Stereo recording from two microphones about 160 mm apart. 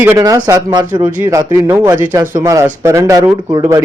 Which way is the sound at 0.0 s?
15° right (ahead or behind).